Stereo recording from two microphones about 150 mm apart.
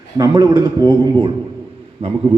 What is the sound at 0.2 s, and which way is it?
A man's voice, 25° right (ahead or behind).